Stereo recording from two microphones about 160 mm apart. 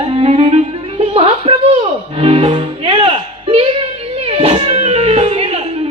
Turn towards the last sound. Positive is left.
turn(degrees=-40)  # may be behind; listen again after turning